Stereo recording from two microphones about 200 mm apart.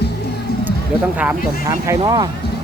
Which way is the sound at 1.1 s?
5° right (ahead or behind).